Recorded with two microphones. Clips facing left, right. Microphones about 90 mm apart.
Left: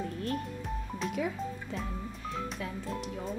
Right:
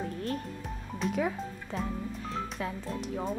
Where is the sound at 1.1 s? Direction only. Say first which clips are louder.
Right 2 dB; 45° right (ahead or behind).